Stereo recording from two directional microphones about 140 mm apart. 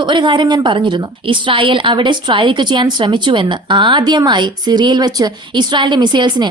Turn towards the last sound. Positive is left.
turn(degrees=-30)  # may be behind; listen again after turning